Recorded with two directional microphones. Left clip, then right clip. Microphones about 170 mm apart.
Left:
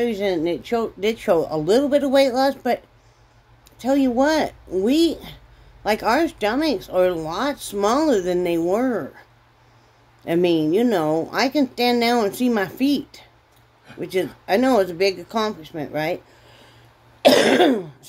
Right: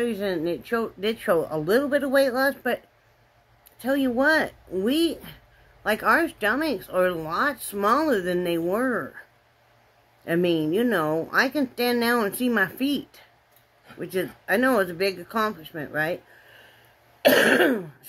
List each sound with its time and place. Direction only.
0.0 s speech: 5° left (ahead or behind)
3.8 s speech: 5° left (ahead or behind)
10.2 s speech: 5° left (ahead or behind)
17.2 s speech: centre (ahead or behind)